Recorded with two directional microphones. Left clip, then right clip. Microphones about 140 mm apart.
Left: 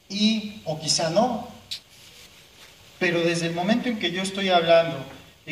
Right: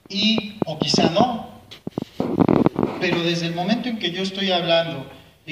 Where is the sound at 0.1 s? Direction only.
65° left (ahead or behind).